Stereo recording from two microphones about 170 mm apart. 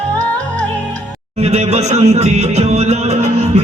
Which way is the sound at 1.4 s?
40° right (ahead or behind).